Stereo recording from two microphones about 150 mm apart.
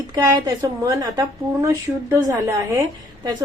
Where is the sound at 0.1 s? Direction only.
25° right (ahead or behind).